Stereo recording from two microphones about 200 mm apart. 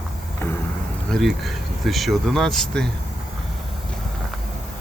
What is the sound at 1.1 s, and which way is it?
Speech, centre (ahead or behind).